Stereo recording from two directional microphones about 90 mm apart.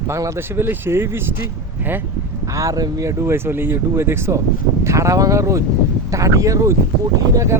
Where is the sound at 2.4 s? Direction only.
40° right (ahead or behind).